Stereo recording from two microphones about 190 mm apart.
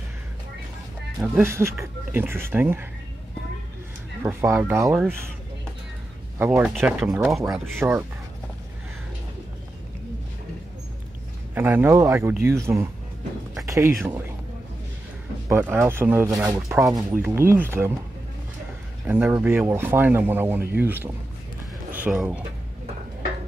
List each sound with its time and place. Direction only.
1.2 s speech: 10° right (ahead or behind)
4.2 s speech: 15° right (ahead or behind)
6.3 s speech: 10° right (ahead or behind)
11.5 s speech: 10° right (ahead or behind)
13.6 s a sound: 15° right (ahead or behind)
15.4 s speech: 15° right (ahead or behind)
19.0 s speech: 10° right (ahead or behind)